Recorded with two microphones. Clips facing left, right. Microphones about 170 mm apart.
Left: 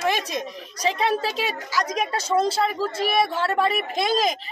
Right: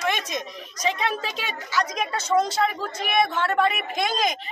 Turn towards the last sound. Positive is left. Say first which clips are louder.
# left 3 dB
turn(degrees=35)  # may be behind; listen again after turning